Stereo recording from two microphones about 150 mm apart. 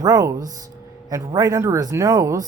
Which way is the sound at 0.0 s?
25° right (ahead or behind).